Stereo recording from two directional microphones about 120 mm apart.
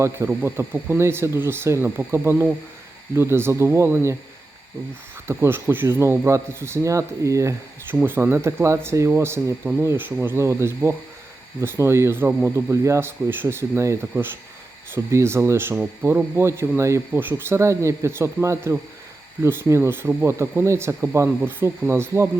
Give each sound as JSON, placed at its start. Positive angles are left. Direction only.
{"t": 0.0, "sound": "speech", "side_deg": -20}
{"t": 5.3, "sound": "speech", "side_deg": -20}
{"t": 12.7, "sound": "speech", "side_deg": -25}